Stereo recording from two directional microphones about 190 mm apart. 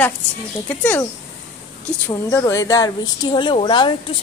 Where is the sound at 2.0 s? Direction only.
15° left (ahead or behind).